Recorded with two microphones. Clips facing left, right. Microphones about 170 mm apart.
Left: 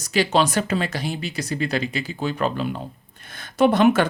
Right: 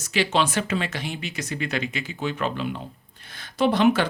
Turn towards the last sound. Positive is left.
turn(degrees=50)  # may be behind; listen again after turning